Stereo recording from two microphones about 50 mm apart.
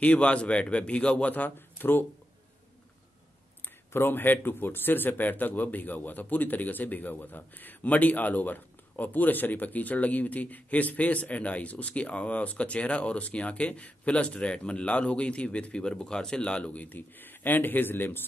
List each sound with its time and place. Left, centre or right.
0.0 s a man's voice: left
1.3 s speech: left
3.6 s speech: left